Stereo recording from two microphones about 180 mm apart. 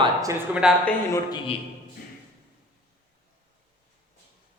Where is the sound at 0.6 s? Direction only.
5° right (ahead or behind).